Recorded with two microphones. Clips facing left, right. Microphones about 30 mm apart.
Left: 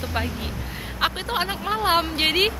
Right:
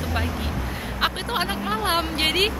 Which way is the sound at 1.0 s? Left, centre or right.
Centre.